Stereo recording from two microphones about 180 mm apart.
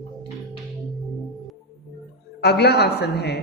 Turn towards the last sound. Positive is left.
turn(degrees=65)  # may be behind; listen again after turning